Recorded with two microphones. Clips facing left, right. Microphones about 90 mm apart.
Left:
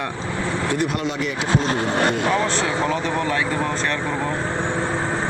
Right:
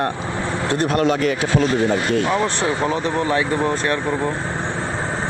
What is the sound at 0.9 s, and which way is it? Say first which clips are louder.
Speech: right 7 dB; 50° right (ahead or behind).